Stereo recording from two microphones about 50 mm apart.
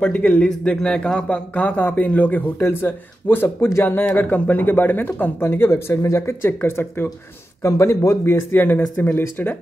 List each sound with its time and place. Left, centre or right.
0.0 s a man's voice: left
1.8 s a man's voice: left
2.6 s speech: left
6.4 s speech: left
7.6 s speech: left
8.3 s a man's voice: left